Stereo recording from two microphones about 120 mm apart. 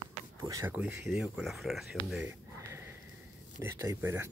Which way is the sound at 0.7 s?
10° right (ahead or behind).